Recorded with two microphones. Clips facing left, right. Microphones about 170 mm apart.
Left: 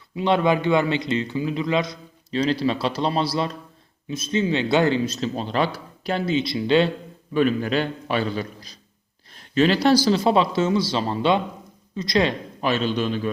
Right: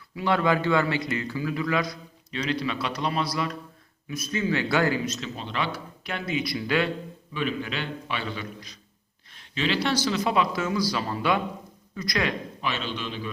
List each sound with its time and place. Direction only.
0.2 s speech: 20° left (ahead or behind)
2.3 s speech: 35° left (ahead or behind)
7.3 s a man's voice: 45° left (ahead or behind); by 12.3 s 25° left (ahead or behind)
12.6 s a man's voice: 40° left (ahead or behind)